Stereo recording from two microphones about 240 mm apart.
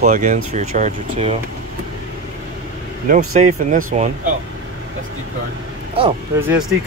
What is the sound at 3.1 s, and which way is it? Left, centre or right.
Speech, right.